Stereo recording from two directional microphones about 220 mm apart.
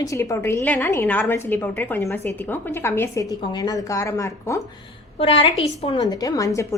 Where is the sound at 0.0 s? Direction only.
15° left (ahead or behind).